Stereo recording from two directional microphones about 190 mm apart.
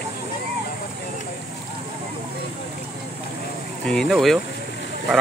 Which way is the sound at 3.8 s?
5° left (ahead or behind).